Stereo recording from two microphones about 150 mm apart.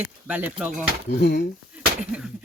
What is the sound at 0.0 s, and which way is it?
Speech, 10° right (ahead or behind).